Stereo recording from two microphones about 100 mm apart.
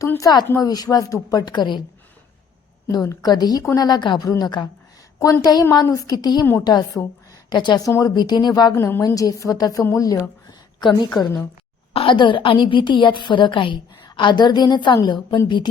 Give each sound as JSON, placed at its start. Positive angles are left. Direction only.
{"t": 0.2, "sound": "a woman's voice", "side_deg": 45}
{"t": 2.9, "sound": "a woman's voice", "side_deg": 40}
{"t": 7.9, "sound": "a woman's voice", "side_deg": 35}
{"t": 8.1, "sound": "a woman's voice", "side_deg": 45}
{"t": 8.7, "sound": "a woman's voice", "side_deg": 30}
{"t": 9.8, "sound": "a sound", "side_deg": 30}
{"t": 11.1, "sound": "a woman's voice", "side_deg": 40}
{"t": 11.9, "sound": "a woman's voice", "side_deg": 60}